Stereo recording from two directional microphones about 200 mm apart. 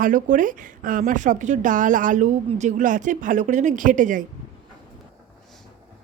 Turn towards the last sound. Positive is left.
turn(degrees=-40)  # may be behind; listen again after turning